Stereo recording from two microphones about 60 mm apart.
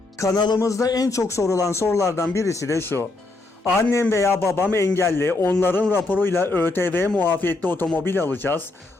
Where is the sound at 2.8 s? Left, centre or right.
Left.